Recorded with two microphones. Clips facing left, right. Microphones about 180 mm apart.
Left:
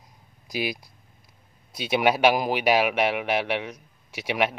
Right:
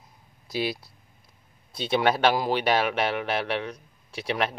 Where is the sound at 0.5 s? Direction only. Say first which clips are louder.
Right 1 dB; 15° left (ahead or behind).